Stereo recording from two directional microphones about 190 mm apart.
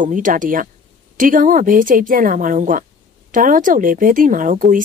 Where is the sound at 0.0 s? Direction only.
45° right (ahead or behind).